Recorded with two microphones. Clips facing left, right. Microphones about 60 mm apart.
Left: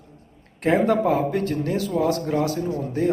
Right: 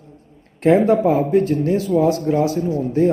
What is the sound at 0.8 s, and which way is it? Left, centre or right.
Speech, right.